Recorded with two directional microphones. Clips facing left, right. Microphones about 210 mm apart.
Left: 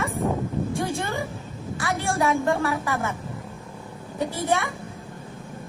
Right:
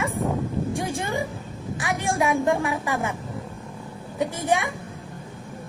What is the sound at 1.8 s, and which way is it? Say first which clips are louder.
Speech: even; 15° right (ahead or behind).